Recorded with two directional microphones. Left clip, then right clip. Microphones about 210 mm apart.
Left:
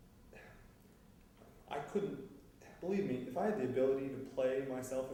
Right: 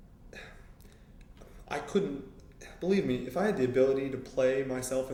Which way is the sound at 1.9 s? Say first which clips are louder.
Right 10 dB; 35° right (ahead or behind).